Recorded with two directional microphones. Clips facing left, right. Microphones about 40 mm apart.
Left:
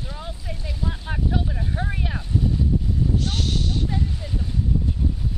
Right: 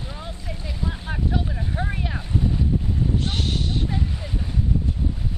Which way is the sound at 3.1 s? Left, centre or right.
Right.